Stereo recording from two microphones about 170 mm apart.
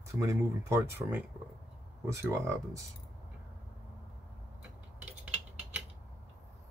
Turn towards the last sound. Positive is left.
turn(degrees=-10)  # may be behind; listen again after turning